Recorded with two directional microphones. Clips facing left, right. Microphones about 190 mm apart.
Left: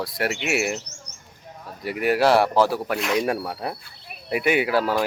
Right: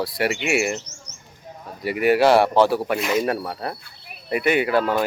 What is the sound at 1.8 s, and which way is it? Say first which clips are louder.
Speech: right 3 dB; centre (ahead or behind).